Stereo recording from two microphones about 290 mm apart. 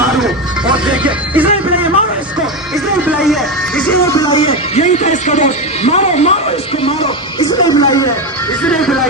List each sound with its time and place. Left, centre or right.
0.7 s music: centre
3.1 s music: centre; by 6.3 s left
6.8 s a sound: centre
8.6 s music: centre